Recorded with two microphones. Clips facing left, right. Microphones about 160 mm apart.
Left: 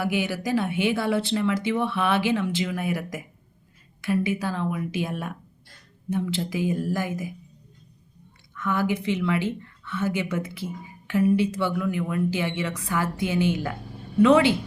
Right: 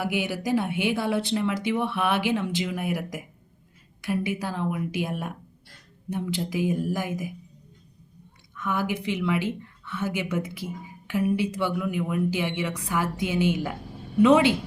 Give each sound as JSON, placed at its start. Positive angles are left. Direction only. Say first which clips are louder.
{"t": 0.0, "sound": "a woman's voice", "louder": "left 1 dB", "side_deg": -15}
{"t": 8.5, "sound": "a woman's voice", "louder": "left 3 dB", "side_deg": -15}